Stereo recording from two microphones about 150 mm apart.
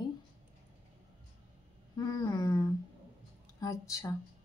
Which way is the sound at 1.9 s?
25° left (ahead or behind).